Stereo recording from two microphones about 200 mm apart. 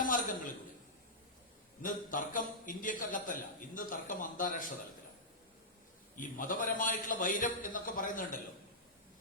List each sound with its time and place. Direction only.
0.0 s a sound: 40° left (ahead or behind)
1.8 s a man's voice: 40° left (ahead or behind)
6.1 s a man's voice: 40° left (ahead or behind)